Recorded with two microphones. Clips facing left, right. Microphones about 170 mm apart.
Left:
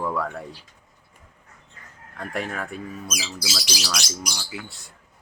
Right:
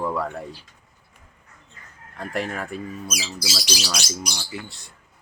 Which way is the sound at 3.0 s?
15° right (ahead or behind).